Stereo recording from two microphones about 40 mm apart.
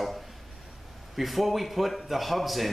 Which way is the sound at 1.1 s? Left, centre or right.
Centre.